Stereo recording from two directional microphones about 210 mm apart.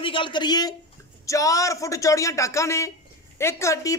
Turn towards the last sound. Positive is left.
turn(degrees=15)  # may be behind; listen again after turning